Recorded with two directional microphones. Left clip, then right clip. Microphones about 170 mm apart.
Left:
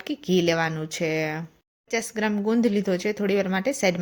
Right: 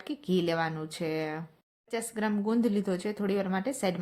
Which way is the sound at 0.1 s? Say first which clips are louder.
Left 7 dB; 15° left (ahead or behind).